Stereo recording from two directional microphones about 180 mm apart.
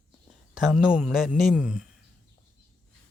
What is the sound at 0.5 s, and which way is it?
Speech, 5° right (ahead or behind).